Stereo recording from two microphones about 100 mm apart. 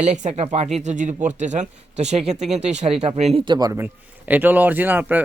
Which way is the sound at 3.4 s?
45° right (ahead or behind).